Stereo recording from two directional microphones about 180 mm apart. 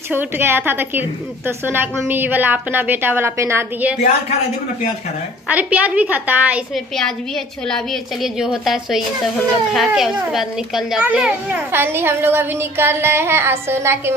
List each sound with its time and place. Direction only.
0.1 s a child's voice: 10° right (ahead or behind)
5.5 s a child's voice: 10° right (ahead or behind)
7.7 s a woman's voice: centre (ahead or behind)